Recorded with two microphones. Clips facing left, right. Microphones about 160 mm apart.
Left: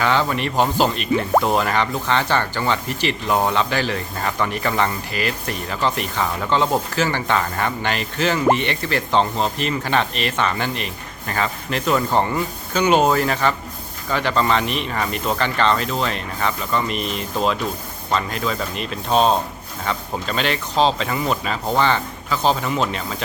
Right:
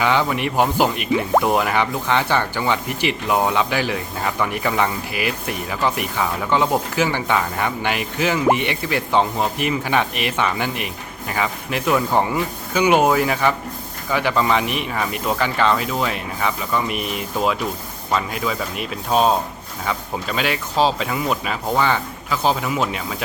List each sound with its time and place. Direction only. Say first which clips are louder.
0.0 s speech: right 1 dB; 15° right (ahead or behind)